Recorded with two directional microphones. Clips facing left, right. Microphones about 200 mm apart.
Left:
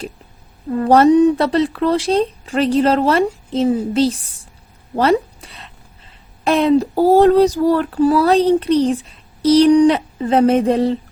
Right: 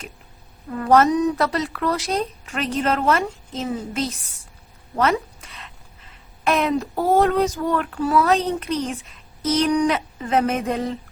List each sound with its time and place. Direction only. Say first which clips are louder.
0.7 s a woman's voice: left 6 dB; 30° left (ahead or behind)